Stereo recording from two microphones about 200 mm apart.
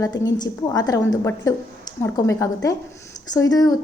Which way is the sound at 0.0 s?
20° left (ahead or behind).